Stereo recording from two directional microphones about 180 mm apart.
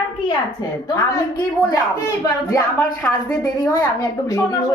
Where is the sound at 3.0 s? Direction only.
10° left (ahead or behind).